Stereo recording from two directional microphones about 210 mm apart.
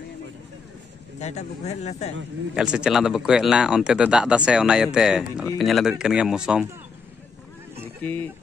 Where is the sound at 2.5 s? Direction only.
5° right (ahead or behind).